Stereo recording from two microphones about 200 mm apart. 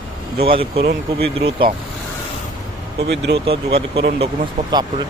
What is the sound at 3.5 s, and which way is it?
Speech, 25° right (ahead or behind).